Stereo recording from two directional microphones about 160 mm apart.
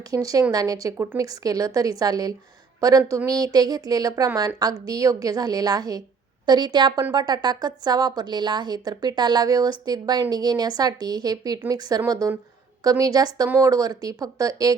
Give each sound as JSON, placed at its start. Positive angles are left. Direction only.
{"t": 0.1, "sound": "a woman's voice", "side_deg": -20}